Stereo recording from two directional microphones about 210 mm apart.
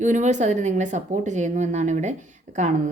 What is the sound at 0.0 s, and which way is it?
Speech, 35° right (ahead or behind).